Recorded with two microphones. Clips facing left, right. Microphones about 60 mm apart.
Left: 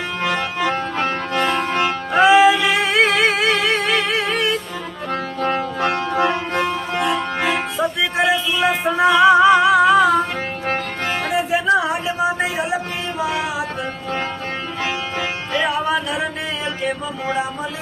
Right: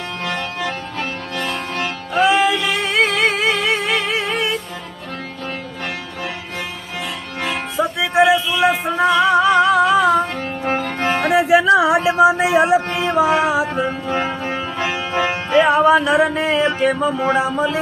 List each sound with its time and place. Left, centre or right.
0.7 s music: left
2.3 s music: centre
5.4 s music: left
7.8 s music: centre
11.3 s music: right
13.5 s mantra: right
13.8 s music: centre
15.6 s music: right